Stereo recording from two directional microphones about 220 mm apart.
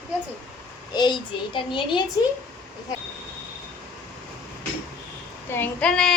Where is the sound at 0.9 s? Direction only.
20° left (ahead or behind).